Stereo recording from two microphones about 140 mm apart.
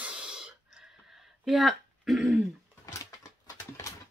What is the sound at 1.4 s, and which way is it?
Speech, centre (ahead or behind).